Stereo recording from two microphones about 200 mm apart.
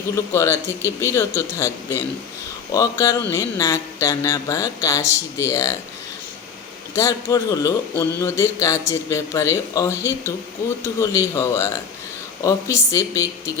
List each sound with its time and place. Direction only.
0.3 s a man's voice: 15° left (ahead or behind)
6.9 s a man's voice: 15° left (ahead or behind)